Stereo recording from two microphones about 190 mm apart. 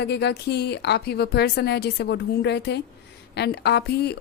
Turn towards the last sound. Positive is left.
turn(degrees=60)  # may be behind; listen again after turning